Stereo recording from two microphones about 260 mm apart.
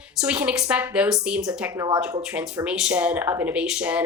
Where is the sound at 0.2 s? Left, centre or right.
Centre.